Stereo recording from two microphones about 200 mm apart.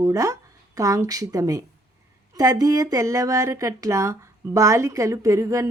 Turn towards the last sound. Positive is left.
turn(degrees=-15)  # may be behind; listen again after turning